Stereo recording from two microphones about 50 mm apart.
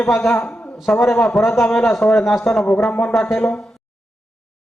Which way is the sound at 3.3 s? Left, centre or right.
Centre.